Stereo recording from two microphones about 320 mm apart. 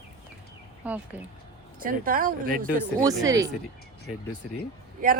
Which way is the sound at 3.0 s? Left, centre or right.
Centre.